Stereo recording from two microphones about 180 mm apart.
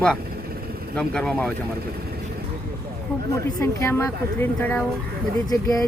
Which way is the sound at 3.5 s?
15° left (ahead or behind).